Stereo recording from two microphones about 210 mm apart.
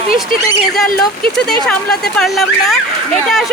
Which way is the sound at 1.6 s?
5° left (ahead or behind).